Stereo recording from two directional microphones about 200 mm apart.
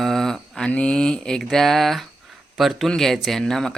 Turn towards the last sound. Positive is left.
turn(degrees=0)  # may be behind; listen again after turning